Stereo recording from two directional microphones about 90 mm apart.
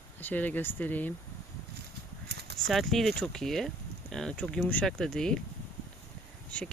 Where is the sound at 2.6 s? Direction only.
Centre (ahead or behind).